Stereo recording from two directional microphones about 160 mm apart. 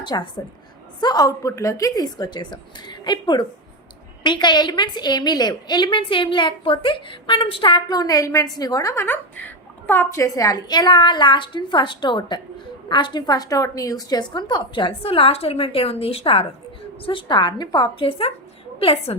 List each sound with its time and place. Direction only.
0.0 s a woman's voice: 25° left (ahead or behind)